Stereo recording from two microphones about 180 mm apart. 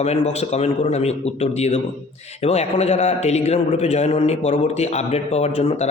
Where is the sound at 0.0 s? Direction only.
35° left (ahead or behind).